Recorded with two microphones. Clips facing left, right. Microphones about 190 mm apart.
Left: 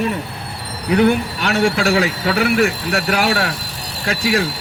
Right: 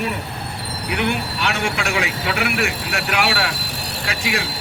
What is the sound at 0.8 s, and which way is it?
Speech, 40° left (ahead or behind).